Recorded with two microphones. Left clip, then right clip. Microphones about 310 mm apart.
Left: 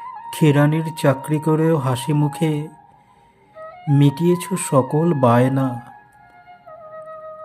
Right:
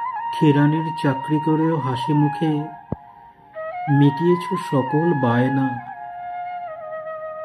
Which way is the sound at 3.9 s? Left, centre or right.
Left.